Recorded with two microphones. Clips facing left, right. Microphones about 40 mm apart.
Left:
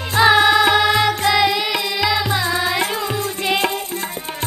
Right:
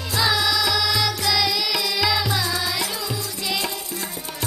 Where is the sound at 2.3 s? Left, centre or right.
Left.